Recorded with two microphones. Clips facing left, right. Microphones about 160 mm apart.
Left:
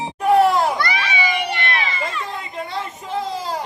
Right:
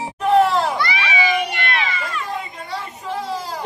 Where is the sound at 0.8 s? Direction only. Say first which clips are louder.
Even; 45° left (ahead or behind).